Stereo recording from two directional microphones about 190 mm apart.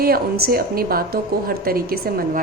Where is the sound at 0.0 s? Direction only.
55° right (ahead or behind).